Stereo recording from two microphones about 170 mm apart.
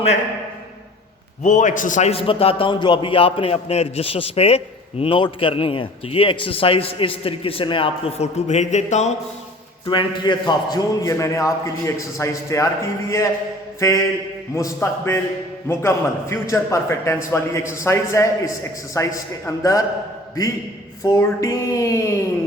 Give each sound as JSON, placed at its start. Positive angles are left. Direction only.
{"t": 1.5, "sound": "a man's voice", "side_deg": 45}
{"t": 9.8, "sound": "a man's voice", "side_deg": 30}
{"t": 21.0, "sound": "a man's voice", "side_deg": 20}